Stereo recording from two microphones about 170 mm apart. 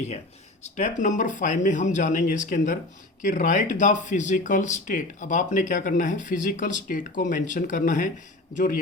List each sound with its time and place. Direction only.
0.6 s speech: 45° left (ahead or behind)